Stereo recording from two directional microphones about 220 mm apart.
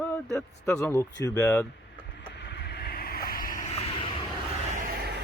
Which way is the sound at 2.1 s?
50° left (ahead or behind).